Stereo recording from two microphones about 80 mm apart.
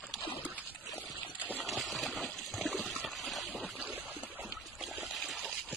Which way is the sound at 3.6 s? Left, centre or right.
Centre.